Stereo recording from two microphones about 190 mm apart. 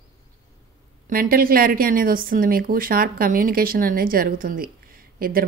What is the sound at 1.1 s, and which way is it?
A woman's voice, 50° right (ahead or behind).